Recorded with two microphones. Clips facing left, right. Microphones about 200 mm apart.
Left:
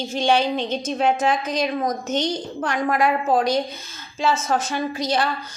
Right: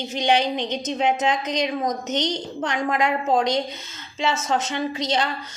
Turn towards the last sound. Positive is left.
turn(degrees=-20)  # may be behind; listen again after turning